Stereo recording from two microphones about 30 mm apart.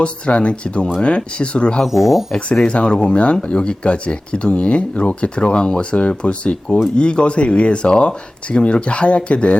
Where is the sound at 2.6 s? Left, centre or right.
Left.